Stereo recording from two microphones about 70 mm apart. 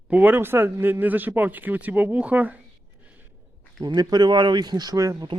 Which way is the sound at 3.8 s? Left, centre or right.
Right.